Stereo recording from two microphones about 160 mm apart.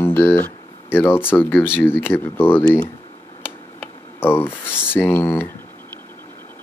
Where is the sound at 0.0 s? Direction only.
15° left (ahead or behind).